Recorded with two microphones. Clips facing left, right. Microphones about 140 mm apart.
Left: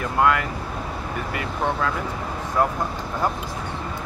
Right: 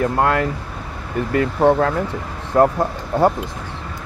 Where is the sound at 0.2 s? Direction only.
35° right (ahead or behind).